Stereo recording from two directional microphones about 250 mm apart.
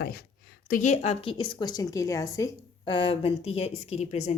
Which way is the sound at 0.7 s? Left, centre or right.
Left.